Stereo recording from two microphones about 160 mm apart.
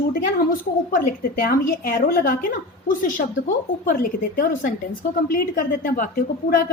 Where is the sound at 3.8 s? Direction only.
60° left (ahead or behind).